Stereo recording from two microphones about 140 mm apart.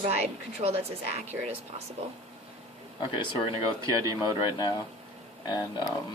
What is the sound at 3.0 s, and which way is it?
Speech, 35° left (ahead or behind).